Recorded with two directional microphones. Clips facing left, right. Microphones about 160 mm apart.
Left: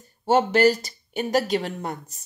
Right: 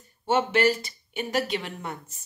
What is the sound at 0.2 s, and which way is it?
Speech, 40° left (ahead or behind).